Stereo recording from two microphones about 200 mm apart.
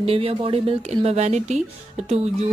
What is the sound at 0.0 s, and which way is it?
Speech, 30° right (ahead or behind).